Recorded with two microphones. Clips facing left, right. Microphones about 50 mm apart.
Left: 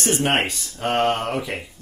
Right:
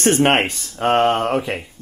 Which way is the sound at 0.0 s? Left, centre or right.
Right.